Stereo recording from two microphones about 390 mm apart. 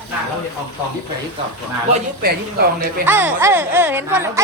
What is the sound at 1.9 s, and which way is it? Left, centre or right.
Speech, right.